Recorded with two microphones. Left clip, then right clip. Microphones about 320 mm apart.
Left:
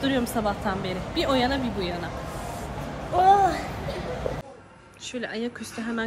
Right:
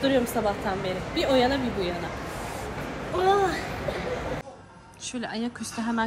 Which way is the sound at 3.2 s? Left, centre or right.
Left.